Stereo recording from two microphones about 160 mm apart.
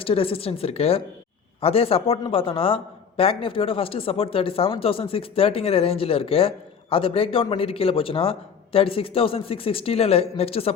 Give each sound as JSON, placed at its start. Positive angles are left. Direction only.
{"t": 0.0, "sound": "a man's voice", "side_deg": 35}